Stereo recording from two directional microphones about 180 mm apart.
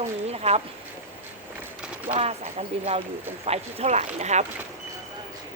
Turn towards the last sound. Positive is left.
turn(degrees=-40)  # may be behind; listen again after turning